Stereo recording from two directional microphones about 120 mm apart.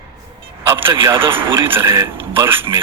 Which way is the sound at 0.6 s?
20° right (ahead or behind).